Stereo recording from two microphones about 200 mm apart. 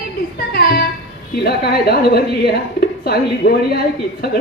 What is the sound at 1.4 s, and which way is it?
A woman's voice, 55° left (ahead or behind).